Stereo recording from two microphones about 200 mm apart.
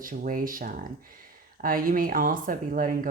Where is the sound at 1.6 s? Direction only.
45° right (ahead or behind).